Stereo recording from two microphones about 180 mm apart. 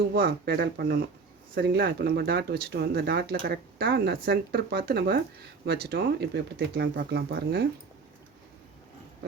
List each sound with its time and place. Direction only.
0.1 s speech: 55° right (ahead or behind)